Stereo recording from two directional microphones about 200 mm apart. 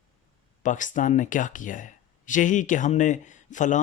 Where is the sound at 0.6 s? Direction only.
40° left (ahead or behind).